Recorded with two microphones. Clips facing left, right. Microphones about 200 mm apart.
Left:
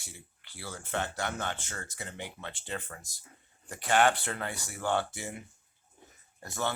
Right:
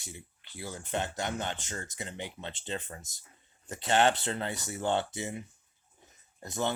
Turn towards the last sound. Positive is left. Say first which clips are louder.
# right 2 dB
turn(degrees=-20)  # may be behind; listen again after turning